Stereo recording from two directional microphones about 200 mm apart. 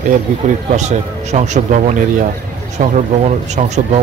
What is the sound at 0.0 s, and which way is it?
A man's voice, 35° right (ahead or behind).